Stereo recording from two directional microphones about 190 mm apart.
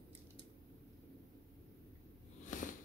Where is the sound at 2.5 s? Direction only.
45° left (ahead or behind).